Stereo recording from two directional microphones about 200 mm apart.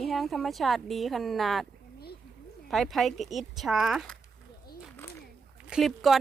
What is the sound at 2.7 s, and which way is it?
Speech, centre (ahead or behind).